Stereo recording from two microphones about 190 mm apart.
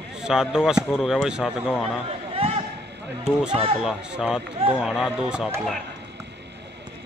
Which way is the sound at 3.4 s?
30° right (ahead or behind).